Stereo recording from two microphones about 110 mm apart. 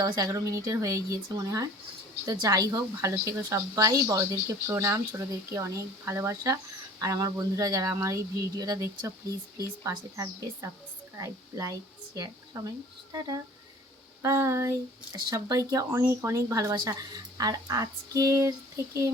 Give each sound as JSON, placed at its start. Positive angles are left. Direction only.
{"t": 0.0, "sound": "a woman's voice", "side_deg": -30}
{"t": 15.1, "sound": "speech", "side_deg": -35}
{"t": 16.7, "sound": "speech", "side_deg": -40}